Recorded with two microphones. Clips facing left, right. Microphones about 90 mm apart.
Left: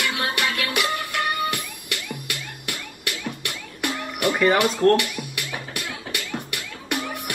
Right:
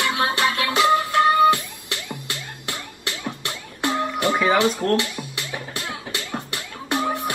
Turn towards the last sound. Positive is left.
turn(degrees=-25)  # may be behind; listen again after turning